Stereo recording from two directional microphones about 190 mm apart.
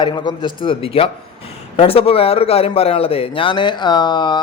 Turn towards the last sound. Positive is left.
turn(degrees=25)  # may be behind; listen again after turning